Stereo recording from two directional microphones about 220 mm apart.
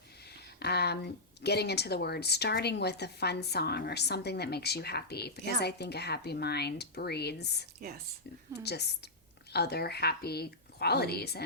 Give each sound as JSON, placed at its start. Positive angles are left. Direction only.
{"t": 0.6, "sound": "speech", "side_deg": 45}